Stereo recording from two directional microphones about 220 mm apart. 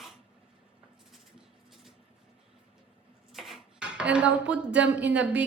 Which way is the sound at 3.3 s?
Centre (ahead or behind).